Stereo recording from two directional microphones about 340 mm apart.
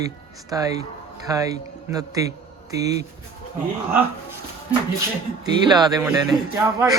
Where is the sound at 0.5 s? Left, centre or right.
Centre.